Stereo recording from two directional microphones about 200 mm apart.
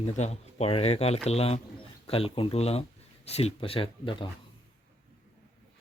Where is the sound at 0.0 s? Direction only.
35° left (ahead or behind).